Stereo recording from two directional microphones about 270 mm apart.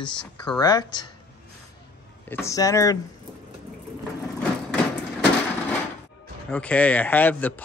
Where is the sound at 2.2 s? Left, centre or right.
Centre.